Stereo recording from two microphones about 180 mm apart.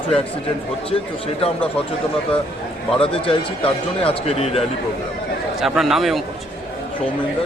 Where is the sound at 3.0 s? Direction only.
30° left (ahead or behind).